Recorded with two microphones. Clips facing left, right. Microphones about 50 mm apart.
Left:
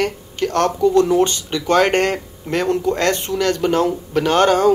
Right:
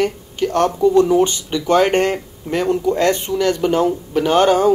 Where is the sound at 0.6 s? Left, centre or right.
Right.